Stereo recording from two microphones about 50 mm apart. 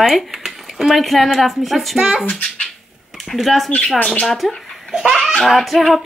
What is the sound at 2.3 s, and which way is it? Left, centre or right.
Speech, left.